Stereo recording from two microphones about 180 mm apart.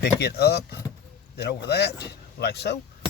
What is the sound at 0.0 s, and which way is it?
Speech, 65° left (ahead or behind).